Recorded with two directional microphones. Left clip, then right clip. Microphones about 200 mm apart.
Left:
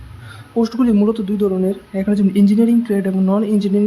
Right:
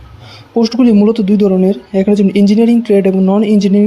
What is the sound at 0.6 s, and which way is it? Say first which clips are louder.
Speech: right 6 dB; 25° right (ahead or behind).